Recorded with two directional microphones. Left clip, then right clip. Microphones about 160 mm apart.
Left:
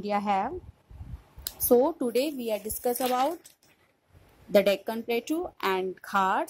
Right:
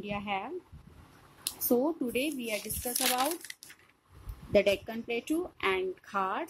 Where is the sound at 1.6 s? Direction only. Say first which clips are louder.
Left 7 dB; 35° left (ahead or behind).